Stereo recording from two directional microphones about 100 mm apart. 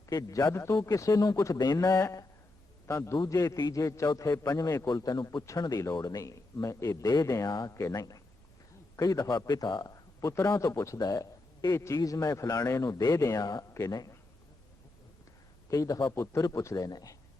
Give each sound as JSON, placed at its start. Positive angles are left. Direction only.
{"t": 0.1, "sound": "a man's voice", "side_deg": 35}
{"t": 15.7, "sound": "a man's voice", "side_deg": 35}